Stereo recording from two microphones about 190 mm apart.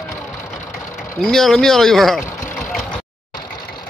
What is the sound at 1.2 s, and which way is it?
Speech, centre (ahead or behind).